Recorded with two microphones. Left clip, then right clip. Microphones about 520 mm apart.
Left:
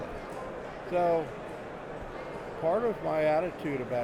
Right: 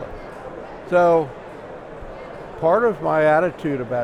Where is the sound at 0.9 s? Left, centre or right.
Right.